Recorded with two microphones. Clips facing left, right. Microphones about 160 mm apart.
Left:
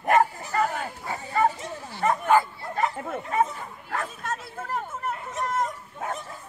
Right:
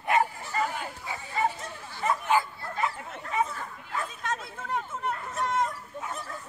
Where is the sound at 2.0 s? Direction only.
50° left (ahead or behind).